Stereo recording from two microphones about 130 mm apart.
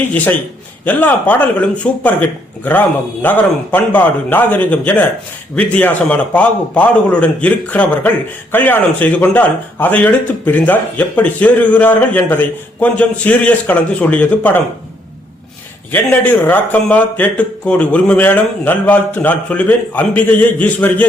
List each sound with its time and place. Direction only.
0.9 s speech: 10° left (ahead or behind)
15.9 s speech: 15° left (ahead or behind)